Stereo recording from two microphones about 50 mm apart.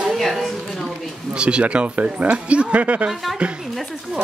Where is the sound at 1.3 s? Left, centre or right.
Centre.